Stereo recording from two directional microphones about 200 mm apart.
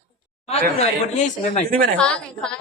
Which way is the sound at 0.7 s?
35° left (ahead or behind).